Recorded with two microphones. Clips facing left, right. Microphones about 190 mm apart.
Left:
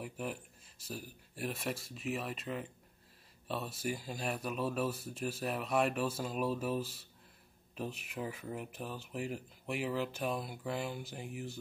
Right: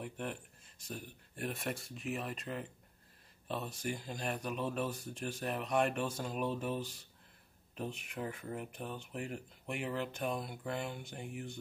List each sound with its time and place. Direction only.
0.0 s speech: 5° left (ahead or behind)